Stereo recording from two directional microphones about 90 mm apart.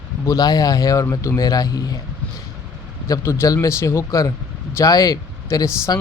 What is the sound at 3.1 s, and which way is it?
A man's voice, 30° left (ahead or behind).